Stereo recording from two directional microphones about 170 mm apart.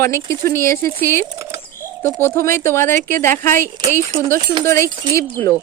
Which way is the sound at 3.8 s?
20° right (ahead or behind).